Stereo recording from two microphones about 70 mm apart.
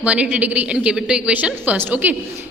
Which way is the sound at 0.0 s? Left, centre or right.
Right.